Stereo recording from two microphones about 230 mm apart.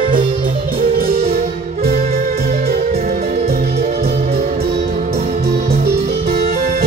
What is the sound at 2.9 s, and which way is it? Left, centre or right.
Music, right.